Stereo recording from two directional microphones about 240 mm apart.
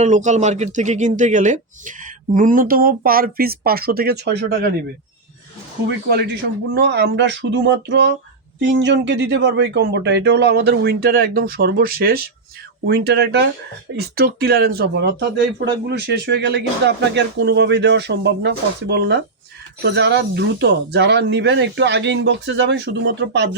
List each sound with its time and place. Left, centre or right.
0.0 s speech: right
6.7 s speech: right